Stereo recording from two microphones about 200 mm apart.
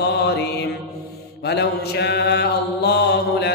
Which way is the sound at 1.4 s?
55° left (ahead or behind).